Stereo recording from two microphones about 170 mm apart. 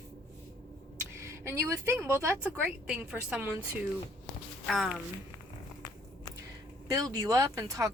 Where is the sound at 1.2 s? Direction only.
15° right (ahead or behind); by 4.9 s centre (ahead or behind).